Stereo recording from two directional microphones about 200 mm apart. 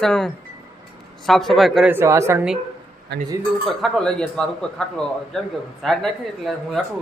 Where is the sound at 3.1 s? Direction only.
55° right (ahead or behind).